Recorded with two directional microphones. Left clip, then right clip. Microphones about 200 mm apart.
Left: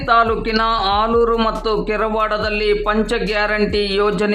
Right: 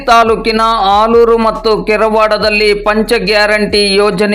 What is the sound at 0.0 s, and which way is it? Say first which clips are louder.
A man's voice: right 7 dB; 25° right (ahead or behind).